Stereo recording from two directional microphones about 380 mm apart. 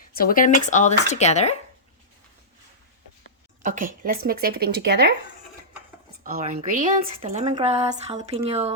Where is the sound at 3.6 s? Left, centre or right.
Right.